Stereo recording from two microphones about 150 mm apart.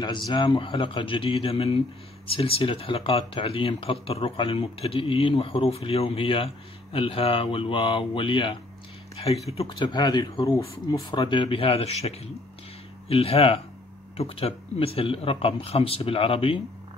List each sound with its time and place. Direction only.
0.3 s speech: 30° left (ahead or behind)
10.4 s speech: 20° left (ahead or behind); by 16.6 s 35° left (ahead or behind)